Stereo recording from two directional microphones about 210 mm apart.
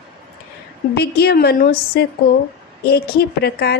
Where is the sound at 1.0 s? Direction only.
50° left (ahead or behind).